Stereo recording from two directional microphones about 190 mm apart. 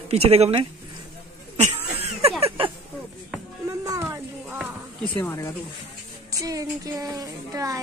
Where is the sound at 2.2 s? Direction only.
30° right (ahead or behind).